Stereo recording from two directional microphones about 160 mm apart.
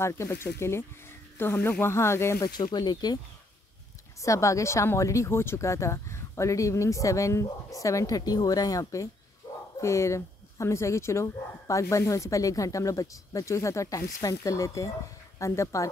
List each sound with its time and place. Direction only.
0.0 s speech: 15° left (ahead or behind)
4.2 s speech: 20° left (ahead or behind)